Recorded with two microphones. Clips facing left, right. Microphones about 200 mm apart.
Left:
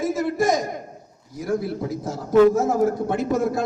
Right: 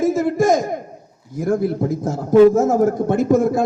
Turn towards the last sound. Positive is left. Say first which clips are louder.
# right 6 dB
turn(degrees=-50)  # may be behind; listen again after turning